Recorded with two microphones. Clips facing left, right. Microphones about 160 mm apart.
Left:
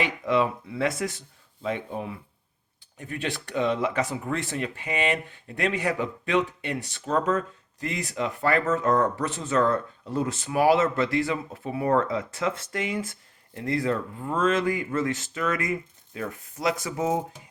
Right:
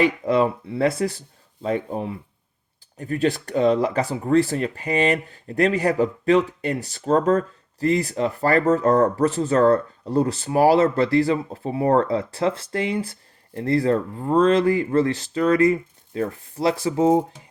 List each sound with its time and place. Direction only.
0.0 s speech: 40° right (ahead or behind)